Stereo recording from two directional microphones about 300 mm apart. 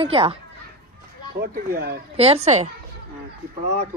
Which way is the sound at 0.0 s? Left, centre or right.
Centre.